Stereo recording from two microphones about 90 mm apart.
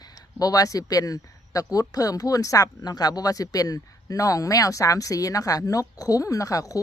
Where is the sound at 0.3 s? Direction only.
40° left (ahead or behind).